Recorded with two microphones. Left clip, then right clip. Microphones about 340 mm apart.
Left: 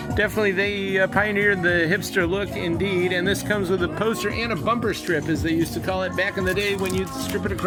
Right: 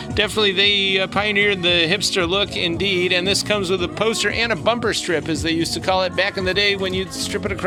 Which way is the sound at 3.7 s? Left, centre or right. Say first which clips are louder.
Right 3 dB; right.